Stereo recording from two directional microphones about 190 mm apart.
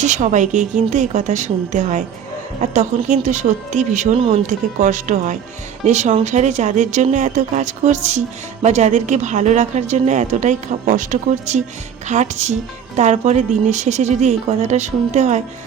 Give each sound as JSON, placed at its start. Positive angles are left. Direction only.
{"t": 0.0, "sound": "a woman's voice", "side_deg": -40}